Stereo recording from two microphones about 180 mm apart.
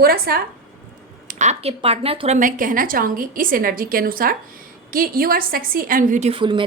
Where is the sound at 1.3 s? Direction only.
40° right (ahead or behind).